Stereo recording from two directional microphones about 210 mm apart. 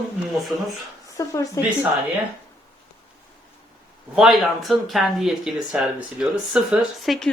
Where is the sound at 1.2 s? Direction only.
15° left (ahead or behind).